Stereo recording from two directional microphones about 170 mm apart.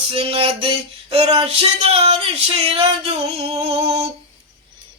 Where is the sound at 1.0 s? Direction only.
35° right (ahead or behind).